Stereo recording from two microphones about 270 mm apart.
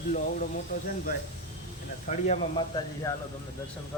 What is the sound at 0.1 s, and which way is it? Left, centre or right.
Speech, left.